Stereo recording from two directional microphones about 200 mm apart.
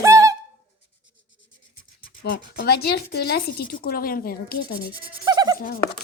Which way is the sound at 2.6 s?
50° left (ahead or behind).